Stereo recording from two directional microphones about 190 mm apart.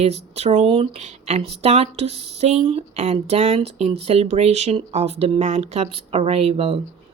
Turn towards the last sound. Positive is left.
turn(degrees=-30)  # may be behind; listen again after turning